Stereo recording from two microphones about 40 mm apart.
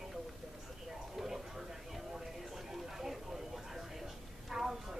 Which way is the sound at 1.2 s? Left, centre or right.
Centre.